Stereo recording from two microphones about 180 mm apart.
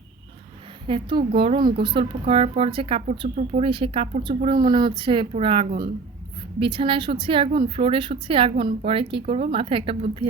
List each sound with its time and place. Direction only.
0.9 s speech: 30° right (ahead or behind)